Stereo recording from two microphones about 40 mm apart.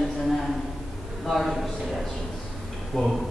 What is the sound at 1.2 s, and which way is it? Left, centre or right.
Speech, centre.